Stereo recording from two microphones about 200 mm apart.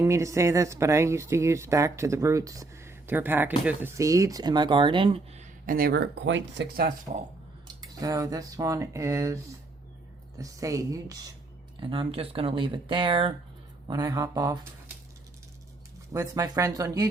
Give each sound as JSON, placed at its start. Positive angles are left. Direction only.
{"t": 0.0, "sound": "speech", "side_deg": -15}
{"t": 7.8, "sound": "speech", "side_deg": -20}
{"t": 16.1, "sound": "speech", "side_deg": -15}